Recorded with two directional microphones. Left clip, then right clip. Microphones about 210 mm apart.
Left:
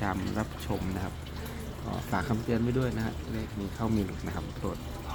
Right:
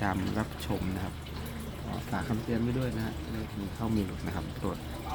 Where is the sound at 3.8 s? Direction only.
15° left (ahead or behind).